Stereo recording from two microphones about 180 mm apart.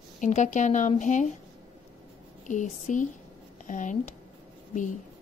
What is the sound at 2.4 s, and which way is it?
A woman's voice, 45° left (ahead or behind).